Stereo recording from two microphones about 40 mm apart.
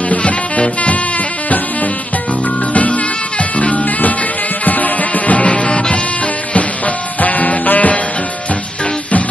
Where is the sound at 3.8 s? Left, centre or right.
Left.